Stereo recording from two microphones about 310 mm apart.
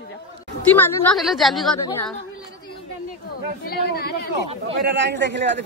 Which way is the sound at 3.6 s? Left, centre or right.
Left.